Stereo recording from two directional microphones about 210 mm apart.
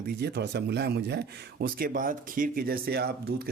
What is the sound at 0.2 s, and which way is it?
Speech, 50° right (ahead or behind).